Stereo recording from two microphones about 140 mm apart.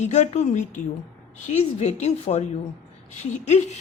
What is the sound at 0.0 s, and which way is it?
A woman's voice, 55° left (ahead or behind).